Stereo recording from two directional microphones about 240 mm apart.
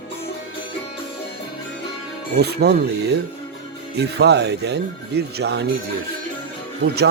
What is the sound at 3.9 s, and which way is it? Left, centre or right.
Speech, right.